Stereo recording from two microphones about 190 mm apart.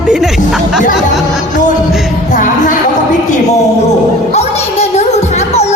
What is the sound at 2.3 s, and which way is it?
Music, 40° left (ahead or behind).